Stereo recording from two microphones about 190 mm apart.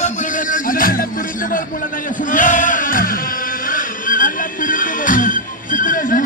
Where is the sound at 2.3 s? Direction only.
40° left (ahead or behind).